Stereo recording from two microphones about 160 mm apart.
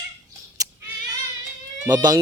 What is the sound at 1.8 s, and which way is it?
Speech, 25° right (ahead or behind).